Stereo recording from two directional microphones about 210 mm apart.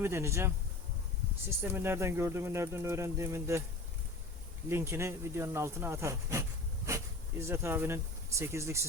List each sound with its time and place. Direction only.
0.0 s speech: 10° right (ahead or behind)
1.6 s speech: 10° right (ahead or behind)
4.7 s speech: 10° right (ahead or behind)